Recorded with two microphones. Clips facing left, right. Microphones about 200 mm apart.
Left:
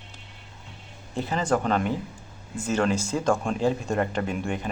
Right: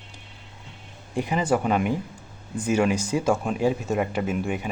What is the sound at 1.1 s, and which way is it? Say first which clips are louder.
Speech: right 2 dB; 10° right (ahead or behind).